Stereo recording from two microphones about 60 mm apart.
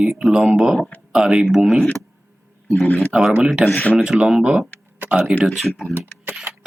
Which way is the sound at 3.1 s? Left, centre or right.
Centre.